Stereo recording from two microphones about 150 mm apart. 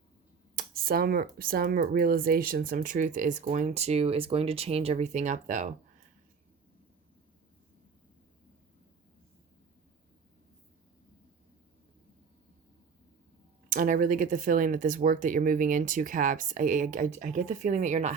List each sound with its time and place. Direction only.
0.5 s speech: 80° right; by 5.7 s 55° right (ahead or behind)
13.7 s speech: 65° right (ahead or behind)